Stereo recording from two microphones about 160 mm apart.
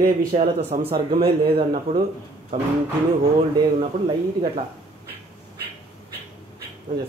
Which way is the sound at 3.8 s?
35° right (ahead or behind).